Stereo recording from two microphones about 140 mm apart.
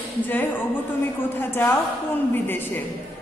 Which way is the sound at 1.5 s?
20° left (ahead or behind).